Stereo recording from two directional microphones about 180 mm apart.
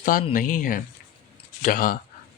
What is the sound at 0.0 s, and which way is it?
Speech, 50° left (ahead or behind).